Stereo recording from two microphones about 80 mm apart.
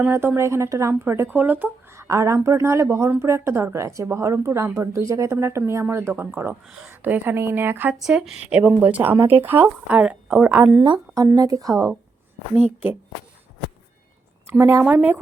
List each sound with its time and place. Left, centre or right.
0.1 s speech: right
2.0 s a woman's voice: right
8.0 s a woman's voice: centre; by 10.0 s right
10.0 s a woman's voice: centre
11.3 s a woman's voice: right
12.5 s a woman's voice: right
14.8 s a woman's voice: centre